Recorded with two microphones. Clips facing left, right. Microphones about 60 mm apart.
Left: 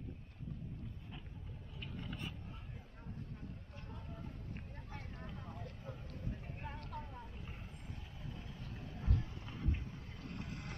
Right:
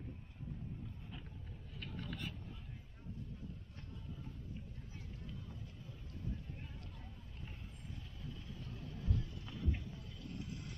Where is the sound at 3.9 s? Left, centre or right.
Left.